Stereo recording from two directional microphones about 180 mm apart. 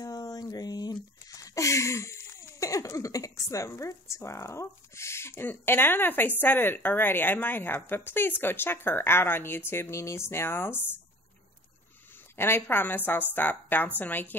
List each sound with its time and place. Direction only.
0.0 s a sound: 20° left (ahead or behind)
6.4 s a woman's voice: 10° left (ahead or behind)
12.4 s a woman's voice: 10° left (ahead or behind)